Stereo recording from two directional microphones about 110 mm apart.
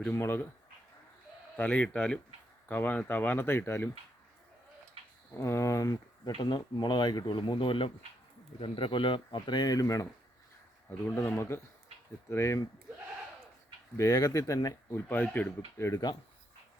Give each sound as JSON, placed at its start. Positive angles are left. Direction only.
{"t": 0.1, "sound": "speech", "side_deg": 20}
{"t": 1.5, "sound": "speech", "side_deg": 15}
{"t": 5.4, "sound": "speech", "side_deg": 25}
{"t": 6.4, "sound": "speech", "side_deg": 45}
{"t": 10.8, "sound": "speech", "side_deg": 20}
{"t": 13.9, "sound": "speech", "side_deg": 30}
{"t": 15.9, "sound": "speech", "side_deg": 40}